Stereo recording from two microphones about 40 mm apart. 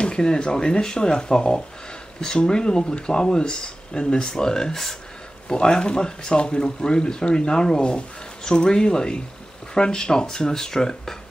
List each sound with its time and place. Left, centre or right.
0.0 s speech: left